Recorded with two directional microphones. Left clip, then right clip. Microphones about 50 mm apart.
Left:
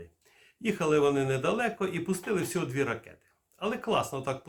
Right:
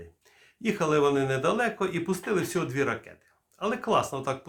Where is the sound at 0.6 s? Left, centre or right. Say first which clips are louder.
Right 1 dB; right.